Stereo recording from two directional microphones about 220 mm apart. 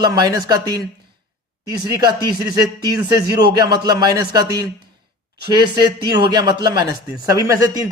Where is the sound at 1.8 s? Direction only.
20° right (ahead or behind).